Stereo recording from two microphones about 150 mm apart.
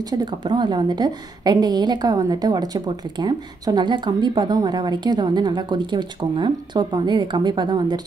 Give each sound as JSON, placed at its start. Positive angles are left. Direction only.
{"t": 0.2, "sound": "a woman's voice", "side_deg": -30}